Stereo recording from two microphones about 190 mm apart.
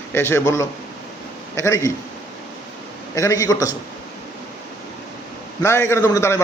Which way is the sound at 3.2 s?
15° left (ahead or behind).